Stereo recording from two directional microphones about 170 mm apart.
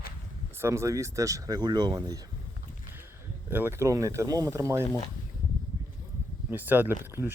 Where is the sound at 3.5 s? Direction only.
15° right (ahead or behind).